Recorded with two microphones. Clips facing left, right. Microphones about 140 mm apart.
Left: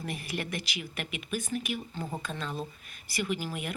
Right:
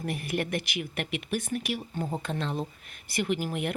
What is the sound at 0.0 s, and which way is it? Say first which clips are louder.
Speech: right 5 dB; 55° right (ahead or behind).